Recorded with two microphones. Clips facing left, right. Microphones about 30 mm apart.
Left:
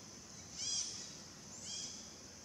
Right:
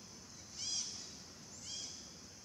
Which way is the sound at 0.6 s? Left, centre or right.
Centre.